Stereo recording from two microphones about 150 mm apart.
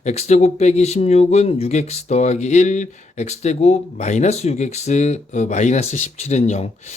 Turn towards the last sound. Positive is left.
turn(degrees=45)  # may be behind; listen again after turning